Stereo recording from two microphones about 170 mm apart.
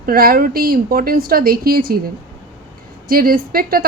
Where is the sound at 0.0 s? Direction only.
60° right (ahead or behind).